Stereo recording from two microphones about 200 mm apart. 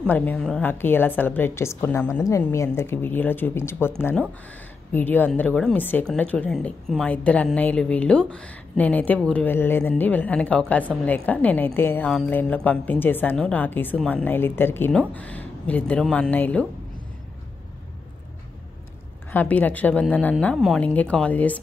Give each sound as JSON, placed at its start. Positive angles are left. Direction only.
{"t": 0.0, "sound": "a woman's voice", "side_deg": 10}
{"t": 19.3, "sound": "a woman's voice", "side_deg": 10}